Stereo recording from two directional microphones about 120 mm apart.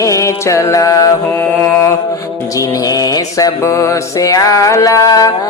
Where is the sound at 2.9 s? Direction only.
30° left (ahead or behind).